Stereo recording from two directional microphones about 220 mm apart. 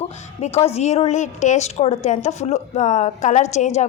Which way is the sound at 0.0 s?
30° left (ahead or behind).